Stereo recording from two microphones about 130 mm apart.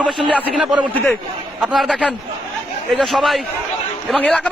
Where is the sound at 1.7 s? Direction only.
Centre (ahead or behind).